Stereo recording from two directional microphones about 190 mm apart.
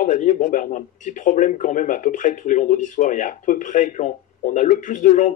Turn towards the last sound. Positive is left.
turn(degrees=40)  # may be behind; listen again after turning